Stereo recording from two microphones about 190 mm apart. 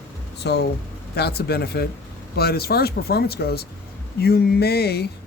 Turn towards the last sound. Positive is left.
turn(degrees=60)  # may be behind; listen again after turning